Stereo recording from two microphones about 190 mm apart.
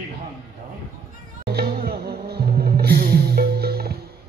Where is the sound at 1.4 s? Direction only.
55° right (ahead or behind).